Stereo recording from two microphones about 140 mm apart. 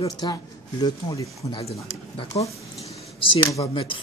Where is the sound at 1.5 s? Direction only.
40° left (ahead or behind).